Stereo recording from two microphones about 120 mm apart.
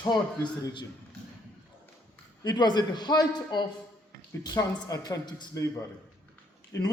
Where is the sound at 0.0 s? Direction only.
35° left (ahead or behind).